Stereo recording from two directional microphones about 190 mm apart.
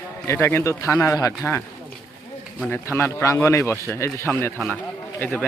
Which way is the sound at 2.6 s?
10° left (ahead or behind).